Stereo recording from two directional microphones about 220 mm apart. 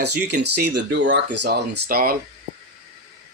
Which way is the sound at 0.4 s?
50° right (ahead or behind).